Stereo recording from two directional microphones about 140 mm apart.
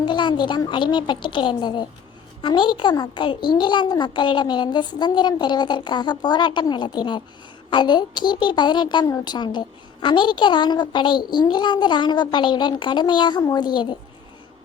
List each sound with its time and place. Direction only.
0.0 s a woman's voice: 35° left (ahead or behind)